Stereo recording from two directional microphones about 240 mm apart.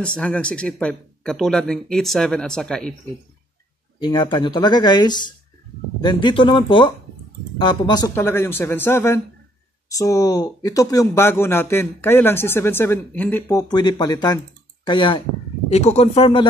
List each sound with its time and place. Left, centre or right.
0.0 s speech: centre
4.0 s speech: centre